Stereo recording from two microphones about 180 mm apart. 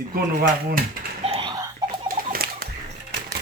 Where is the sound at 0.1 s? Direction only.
50° right (ahead or behind).